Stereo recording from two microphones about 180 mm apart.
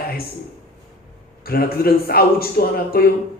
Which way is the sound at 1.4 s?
55° left (ahead or behind).